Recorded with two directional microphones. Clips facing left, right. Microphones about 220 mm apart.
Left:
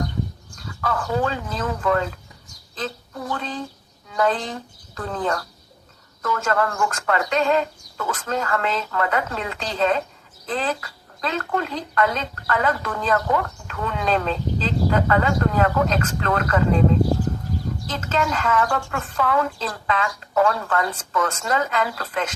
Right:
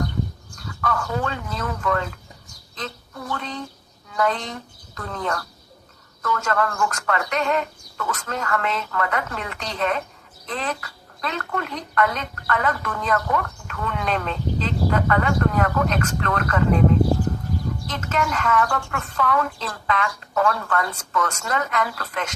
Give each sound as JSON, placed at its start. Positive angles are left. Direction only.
{"t": 0.5, "sound": "speech", "side_deg": 25}
{"t": 17.8, "sound": "speech", "side_deg": 30}